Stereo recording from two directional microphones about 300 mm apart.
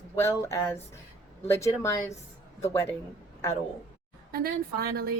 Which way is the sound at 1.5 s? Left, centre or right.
Centre.